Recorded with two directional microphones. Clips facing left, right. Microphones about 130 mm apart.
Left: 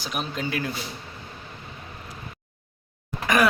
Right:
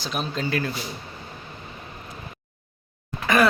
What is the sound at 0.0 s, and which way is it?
Speech, 10° left (ahead or behind).